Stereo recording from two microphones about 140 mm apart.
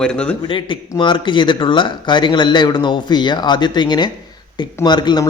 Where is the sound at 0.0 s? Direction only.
5° left (ahead or behind).